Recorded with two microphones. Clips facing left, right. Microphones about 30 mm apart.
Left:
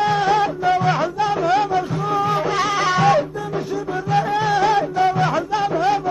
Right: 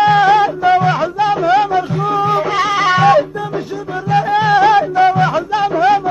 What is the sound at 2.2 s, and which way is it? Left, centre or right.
Music, centre.